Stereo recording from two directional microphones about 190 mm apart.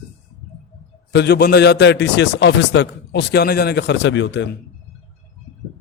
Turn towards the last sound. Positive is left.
turn(degrees=65)  # may be behind; listen again after turning